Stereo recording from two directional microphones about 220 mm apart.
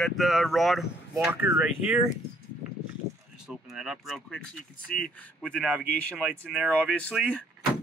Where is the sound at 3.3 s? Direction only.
5° right (ahead or behind).